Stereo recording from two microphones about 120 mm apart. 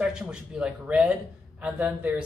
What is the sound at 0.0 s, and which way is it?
Speech, 5° right (ahead or behind).